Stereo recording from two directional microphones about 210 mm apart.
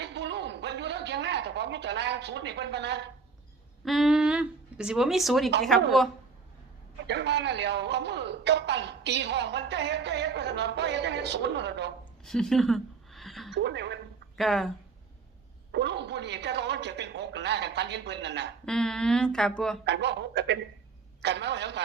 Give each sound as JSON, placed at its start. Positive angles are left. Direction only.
{"t": 0.0, "sound": "a sound", "side_deg": -55}
{"t": 3.8, "sound": "speech", "side_deg": 0}
{"t": 7.1, "sound": "a man's voice", "side_deg": -55}
{"t": 12.2, "sound": "a sound", "side_deg": 0}
{"t": 13.5, "sound": "a woman's voice", "side_deg": -55}
{"t": 14.3, "sound": "speech", "side_deg": 0}
{"t": 15.7, "sound": "a man's voice", "side_deg": -55}
{"t": 18.6, "sound": "speech", "side_deg": 5}
{"t": 19.8, "sound": "a man's voice", "side_deg": -55}